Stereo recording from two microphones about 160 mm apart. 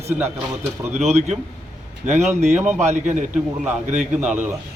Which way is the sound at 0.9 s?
45° right (ahead or behind).